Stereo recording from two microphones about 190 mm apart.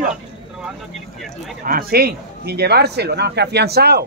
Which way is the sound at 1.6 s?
55° right (ahead or behind).